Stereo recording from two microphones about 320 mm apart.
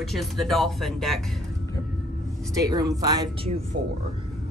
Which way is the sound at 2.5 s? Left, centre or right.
Centre.